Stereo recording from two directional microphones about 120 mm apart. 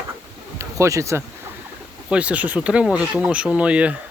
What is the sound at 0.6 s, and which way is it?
Speech, 25° right (ahead or behind).